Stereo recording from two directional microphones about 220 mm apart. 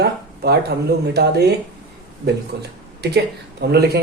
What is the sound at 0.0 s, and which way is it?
Speech, 45° right (ahead or behind).